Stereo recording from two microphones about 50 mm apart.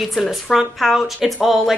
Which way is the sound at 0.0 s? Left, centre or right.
Centre.